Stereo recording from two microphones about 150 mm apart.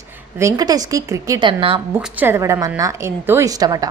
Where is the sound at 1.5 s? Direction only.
40° right (ahead or behind).